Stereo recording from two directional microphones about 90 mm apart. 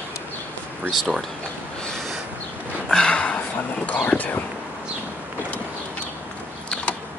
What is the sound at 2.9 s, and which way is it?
Speech, 10° left (ahead or behind).